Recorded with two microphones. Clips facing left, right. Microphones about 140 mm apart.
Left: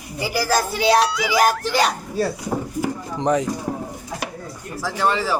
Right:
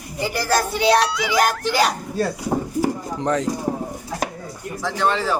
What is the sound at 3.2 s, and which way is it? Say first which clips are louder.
Speech: left 3 dB; 15° left (ahead or behind).